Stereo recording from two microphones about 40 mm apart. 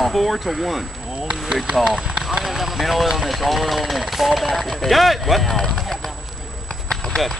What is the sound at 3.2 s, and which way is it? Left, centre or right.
A man's voice, centre.